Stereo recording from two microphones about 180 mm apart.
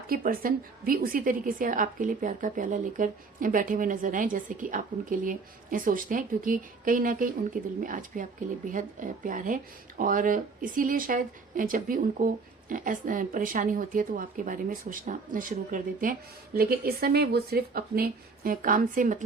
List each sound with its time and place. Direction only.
0.1 s a woman's voice: 55° right (ahead or behind)